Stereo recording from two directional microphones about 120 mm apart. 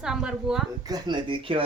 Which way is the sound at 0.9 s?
35° right (ahead or behind).